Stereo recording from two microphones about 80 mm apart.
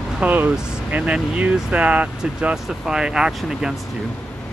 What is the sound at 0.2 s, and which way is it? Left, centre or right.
Speech, right.